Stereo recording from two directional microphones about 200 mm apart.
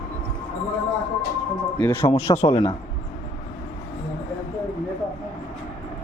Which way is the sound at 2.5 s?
25° left (ahead or behind).